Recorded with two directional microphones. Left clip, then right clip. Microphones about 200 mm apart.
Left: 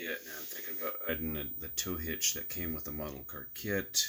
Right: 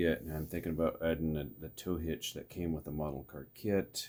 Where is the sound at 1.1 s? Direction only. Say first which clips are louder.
Right 2 dB; 5° left (ahead or behind).